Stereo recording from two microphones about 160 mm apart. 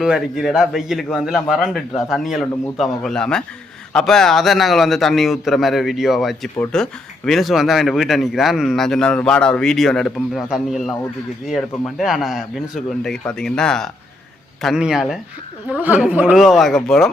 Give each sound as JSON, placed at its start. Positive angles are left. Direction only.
{"t": 0.0, "sound": "speech", "side_deg": -5}